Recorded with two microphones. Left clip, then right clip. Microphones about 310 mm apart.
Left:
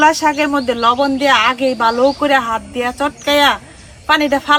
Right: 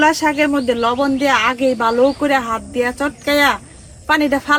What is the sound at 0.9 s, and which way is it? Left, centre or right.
Speech, left.